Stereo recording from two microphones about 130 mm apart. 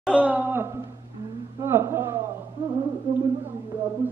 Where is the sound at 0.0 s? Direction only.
10° right (ahead or behind).